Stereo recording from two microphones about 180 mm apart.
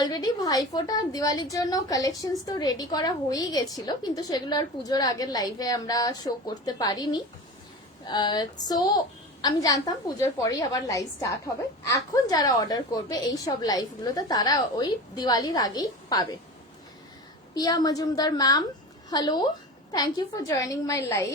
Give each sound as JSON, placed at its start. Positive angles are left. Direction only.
{"t": 0.0, "sound": "a woman's voice", "side_deg": 20}
{"t": 17.5, "sound": "a woman's voice", "side_deg": 20}